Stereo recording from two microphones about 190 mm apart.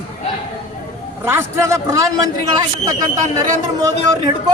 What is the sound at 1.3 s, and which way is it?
A man's voice, 15° right (ahead or behind).